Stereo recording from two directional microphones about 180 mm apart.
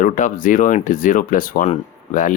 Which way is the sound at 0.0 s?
45° left (ahead or behind).